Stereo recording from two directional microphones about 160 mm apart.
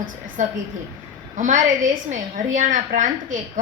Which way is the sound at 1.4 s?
55° right (ahead or behind).